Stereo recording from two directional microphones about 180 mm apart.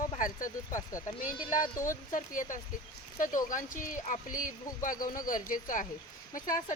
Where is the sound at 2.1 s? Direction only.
45° left (ahead or behind).